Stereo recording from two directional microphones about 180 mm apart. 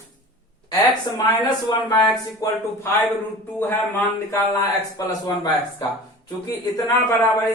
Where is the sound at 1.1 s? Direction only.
20° left (ahead or behind).